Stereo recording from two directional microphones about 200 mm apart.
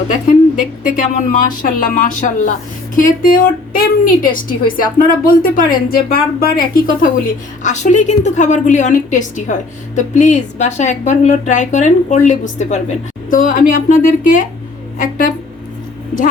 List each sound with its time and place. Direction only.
0.5 s a woman's voice: 40° left (ahead or behind)